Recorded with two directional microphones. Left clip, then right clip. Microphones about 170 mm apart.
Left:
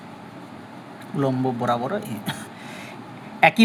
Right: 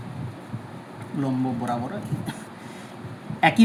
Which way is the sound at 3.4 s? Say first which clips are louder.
Left 3 dB; 50° left (ahead or behind).